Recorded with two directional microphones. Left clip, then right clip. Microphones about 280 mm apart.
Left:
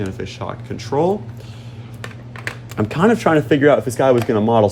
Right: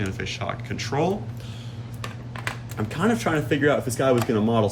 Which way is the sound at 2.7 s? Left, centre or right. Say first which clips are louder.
Left 9 dB; left.